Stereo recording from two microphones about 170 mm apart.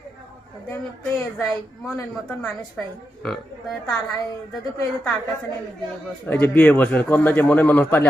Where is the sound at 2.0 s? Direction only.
5° left (ahead or behind).